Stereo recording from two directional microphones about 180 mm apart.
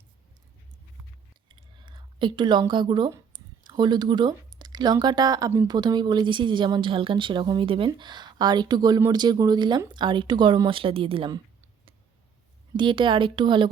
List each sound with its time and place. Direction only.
1.5 s a sound: 25° right (ahead or behind)
3.7 s speech: 25° right (ahead or behind)
12.7 s speech: 25° right (ahead or behind)